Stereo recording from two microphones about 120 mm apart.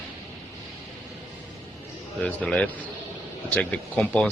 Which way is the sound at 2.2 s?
10° left (ahead or behind).